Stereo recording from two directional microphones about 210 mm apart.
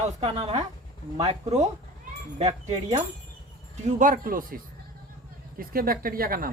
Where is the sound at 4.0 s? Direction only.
40° right (ahead or behind).